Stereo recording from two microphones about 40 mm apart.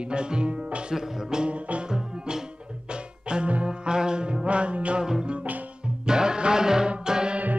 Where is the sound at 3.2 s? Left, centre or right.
Right.